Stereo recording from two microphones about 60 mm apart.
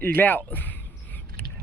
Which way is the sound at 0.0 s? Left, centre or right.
Left.